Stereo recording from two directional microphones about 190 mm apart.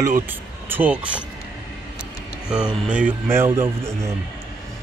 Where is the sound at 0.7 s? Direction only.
10° right (ahead or behind).